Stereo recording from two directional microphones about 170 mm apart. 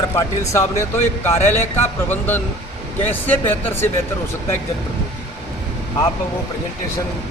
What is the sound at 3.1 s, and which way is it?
Speech, 10° left (ahead or behind).